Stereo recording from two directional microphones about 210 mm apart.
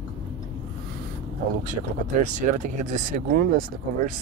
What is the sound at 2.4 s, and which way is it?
Speech, 35° right (ahead or behind).